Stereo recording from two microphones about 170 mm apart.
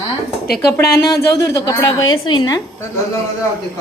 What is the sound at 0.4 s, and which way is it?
Speech, 65° left (ahead or behind).